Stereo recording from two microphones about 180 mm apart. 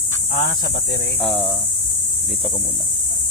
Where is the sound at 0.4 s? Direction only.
65° left (ahead or behind).